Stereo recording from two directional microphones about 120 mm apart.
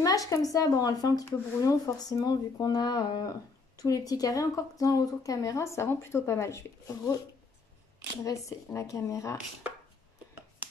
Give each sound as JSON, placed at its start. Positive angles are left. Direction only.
{"t": 0.0, "sound": "speech", "side_deg": 30}
{"t": 8.2, "sound": "speech", "side_deg": 25}